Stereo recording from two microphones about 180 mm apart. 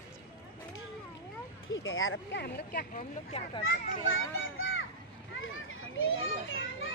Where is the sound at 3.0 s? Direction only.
35° left (ahead or behind).